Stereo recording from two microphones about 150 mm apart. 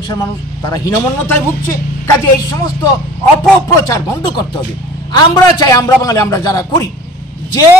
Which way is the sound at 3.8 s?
25° left (ahead or behind).